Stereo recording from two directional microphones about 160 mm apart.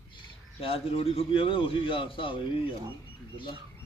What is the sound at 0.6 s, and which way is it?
A man's voice, 35° left (ahead or behind).